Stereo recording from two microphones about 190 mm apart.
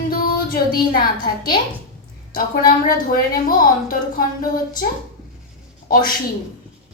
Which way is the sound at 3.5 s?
45° left (ahead or behind).